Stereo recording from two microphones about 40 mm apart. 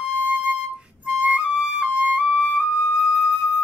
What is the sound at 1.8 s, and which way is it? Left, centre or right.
Flute, right.